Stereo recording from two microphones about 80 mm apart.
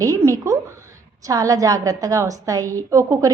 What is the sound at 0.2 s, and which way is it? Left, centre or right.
A woman's voice, right.